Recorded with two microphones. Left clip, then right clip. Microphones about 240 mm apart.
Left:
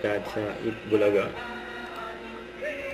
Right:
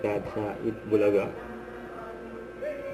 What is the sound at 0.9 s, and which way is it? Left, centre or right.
Speech, centre.